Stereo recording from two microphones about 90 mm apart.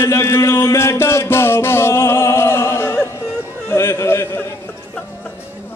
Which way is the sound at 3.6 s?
30° left (ahead or behind).